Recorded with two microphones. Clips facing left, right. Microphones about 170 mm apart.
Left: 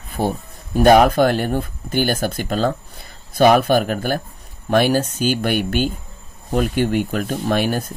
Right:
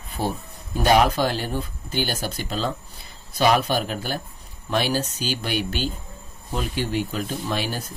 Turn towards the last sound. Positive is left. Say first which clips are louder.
# left 8 dB
turn(degrees=55)  # may be behind; listen again after turning